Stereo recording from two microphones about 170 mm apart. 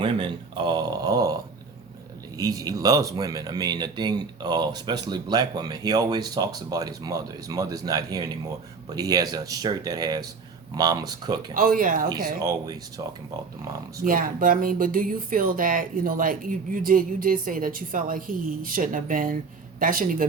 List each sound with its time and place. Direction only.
0.0 s speech: 30° right (ahead or behind)
2.4 s speech: 20° right (ahead or behind)
11.5 s speech: 55° right (ahead or behind)
12.0 s speech: 25° right (ahead or behind)
14.0 s speech: 55° right (ahead or behind)